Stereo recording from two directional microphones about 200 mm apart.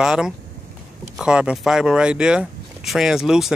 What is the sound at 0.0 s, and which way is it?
Speech, 5° right (ahead or behind).